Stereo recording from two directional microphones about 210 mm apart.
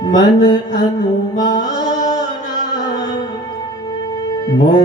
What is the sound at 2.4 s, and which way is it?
Music, 35° left (ahead or behind).